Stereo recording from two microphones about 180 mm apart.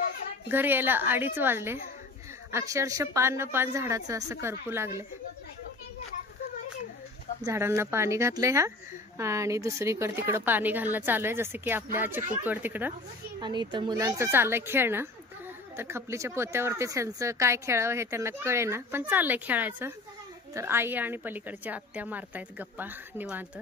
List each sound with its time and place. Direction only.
0.5 s a woman's voice: 10° right (ahead or behind)
7.4 s a woman's voice: 15° right (ahead or behind)
13.4 s a woman's voice: 25° right (ahead or behind)